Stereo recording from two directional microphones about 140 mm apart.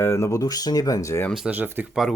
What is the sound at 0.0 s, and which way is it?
Speech, 20° left (ahead or behind).